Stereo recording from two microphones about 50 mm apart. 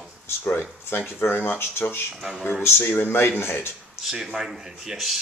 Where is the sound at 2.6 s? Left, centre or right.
Left.